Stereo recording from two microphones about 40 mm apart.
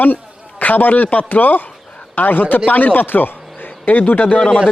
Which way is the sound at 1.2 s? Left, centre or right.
Left.